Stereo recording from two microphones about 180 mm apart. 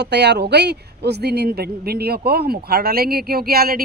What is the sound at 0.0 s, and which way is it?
A man's voice, 65° right (ahead or behind).